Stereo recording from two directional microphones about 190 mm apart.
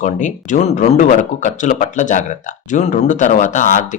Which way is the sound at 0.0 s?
40° left (ahead or behind).